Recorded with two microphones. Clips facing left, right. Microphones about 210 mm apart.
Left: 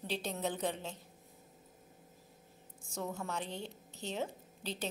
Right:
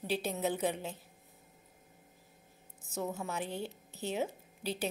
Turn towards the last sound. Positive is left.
turn(degrees=-10)  # may be behind; listen again after turning